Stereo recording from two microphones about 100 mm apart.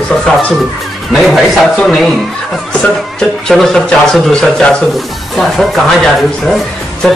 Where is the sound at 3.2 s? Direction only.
5° left (ahead or behind).